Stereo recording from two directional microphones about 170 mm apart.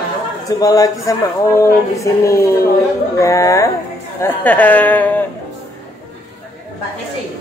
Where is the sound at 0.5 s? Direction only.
20° left (ahead or behind).